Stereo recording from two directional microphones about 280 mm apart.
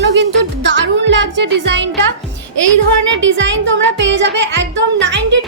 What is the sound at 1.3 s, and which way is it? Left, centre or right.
Music, right.